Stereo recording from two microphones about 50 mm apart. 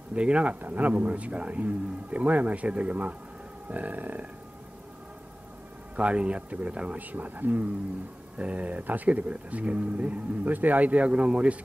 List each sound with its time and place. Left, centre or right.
0.1 s speech: right
3.6 s burping: right
5.9 s speech: right